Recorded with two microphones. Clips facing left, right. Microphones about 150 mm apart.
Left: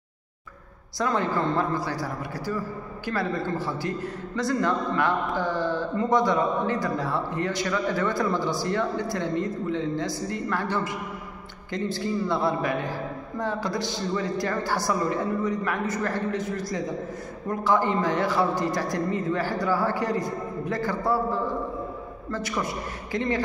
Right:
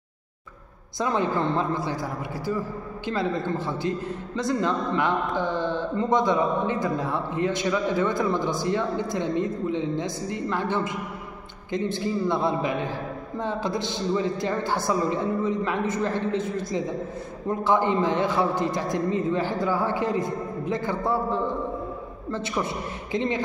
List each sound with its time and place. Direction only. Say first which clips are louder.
0.9 s a man's voice: right 1 dB; 20° right (ahead or behind)